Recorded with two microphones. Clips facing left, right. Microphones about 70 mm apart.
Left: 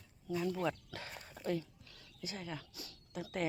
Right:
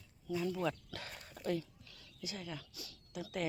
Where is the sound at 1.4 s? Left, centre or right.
Left.